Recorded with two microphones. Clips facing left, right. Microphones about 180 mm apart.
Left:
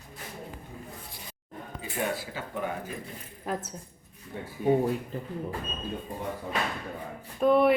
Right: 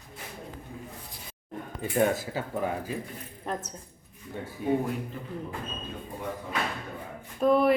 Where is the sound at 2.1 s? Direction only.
45° right (ahead or behind).